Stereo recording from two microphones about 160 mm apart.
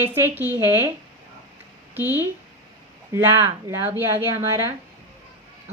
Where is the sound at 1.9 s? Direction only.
15° right (ahead or behind).